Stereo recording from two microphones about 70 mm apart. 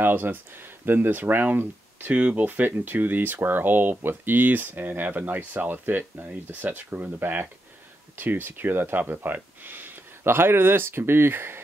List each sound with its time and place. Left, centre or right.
0.0 s speech: right